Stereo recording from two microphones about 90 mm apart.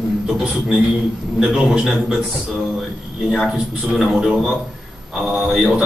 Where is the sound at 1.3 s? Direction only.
10° right (ahead or behind).